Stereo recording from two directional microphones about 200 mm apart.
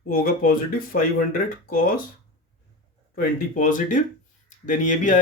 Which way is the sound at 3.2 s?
40° left (ahead or behind).